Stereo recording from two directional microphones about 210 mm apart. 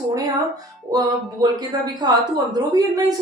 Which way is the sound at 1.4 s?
20° right (ahead or behind).